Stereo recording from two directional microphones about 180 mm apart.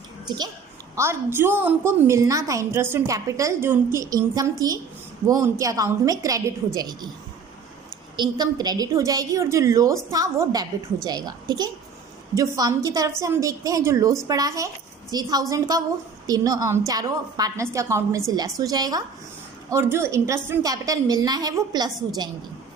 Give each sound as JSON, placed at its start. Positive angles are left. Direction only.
{"t": 0.3, "sound": "a woman's voice", "side_deg": -25}
{"t": 0.9, "sound": "a woman's voice", "side_deg": -15}
{"t": 8.1, "sound": "a woman's voice", "side_deg": -25}